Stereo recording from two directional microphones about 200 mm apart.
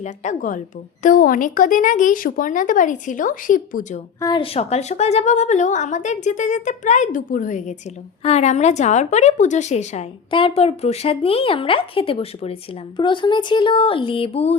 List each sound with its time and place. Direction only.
0.0 s a woman's voice: 35° left (ahead or behind)
4.2 s a woman's voice: 25° left (ahead or behind)